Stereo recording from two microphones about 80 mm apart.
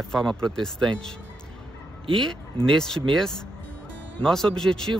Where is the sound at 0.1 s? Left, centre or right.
Centre.